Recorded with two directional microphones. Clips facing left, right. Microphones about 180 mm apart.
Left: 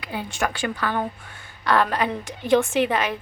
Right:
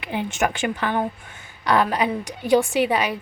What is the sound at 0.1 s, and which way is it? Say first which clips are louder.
A woman's voice: right 4 dB; 20° right (ahead or behind).